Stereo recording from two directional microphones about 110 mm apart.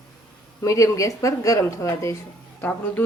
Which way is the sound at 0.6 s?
30° left (ahead or behind).